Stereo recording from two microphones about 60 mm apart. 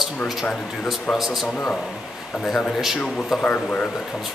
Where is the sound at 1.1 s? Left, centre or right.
Centre.